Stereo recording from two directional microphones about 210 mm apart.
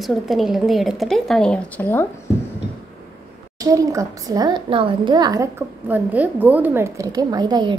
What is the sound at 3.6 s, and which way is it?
A woman's voice, 15° right (ahead or behind).